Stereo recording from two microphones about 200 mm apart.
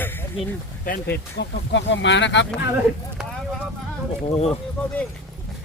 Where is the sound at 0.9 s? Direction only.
55° left (ahead or behind).